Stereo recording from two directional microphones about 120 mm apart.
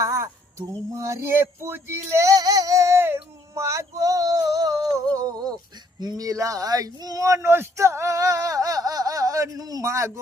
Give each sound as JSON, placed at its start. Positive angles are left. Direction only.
{"t": 0.0, "sound": "a sound", "side_deg": -25}
{"t": 0.9, "sound": "female singing", "side_deg": -25}
{"t": 6.0, "sound": "speech", "side_deg": -30}